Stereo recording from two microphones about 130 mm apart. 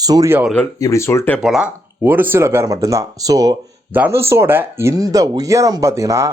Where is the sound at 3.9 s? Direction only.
15° right (ahead or behind).